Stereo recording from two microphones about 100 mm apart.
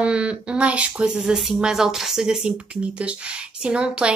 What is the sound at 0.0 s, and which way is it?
Speech, 10° right (ahead or behind).